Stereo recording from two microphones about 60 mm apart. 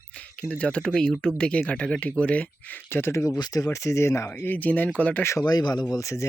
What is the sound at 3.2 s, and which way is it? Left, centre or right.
Speech, left.